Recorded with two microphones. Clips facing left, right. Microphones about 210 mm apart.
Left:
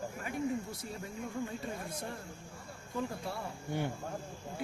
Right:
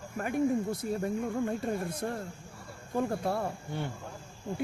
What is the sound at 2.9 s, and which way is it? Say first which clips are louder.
Speech: right 8 dB; 55° right (ahead or behind).